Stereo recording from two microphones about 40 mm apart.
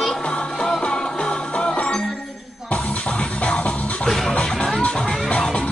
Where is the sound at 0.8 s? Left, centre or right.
Left.